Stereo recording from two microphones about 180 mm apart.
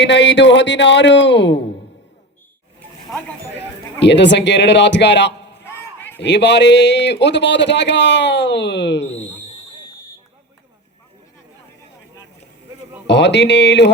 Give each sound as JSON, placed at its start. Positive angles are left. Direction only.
{"t": 0.0, "sound": "speech", "side_deg": 75}
{"t": 4.0, "sound": "speech", "side_deg": 75}
{"t": 5.6, "sound": "a sound", "side_deg": 10}
{"t": 6.2, "sound": "speech", "side_deg": 75}
{"t": 13.1, "sound": "speech", "side_deg": 75}